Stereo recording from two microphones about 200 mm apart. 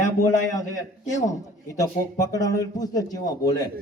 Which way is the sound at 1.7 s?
15° left (ahead or behind).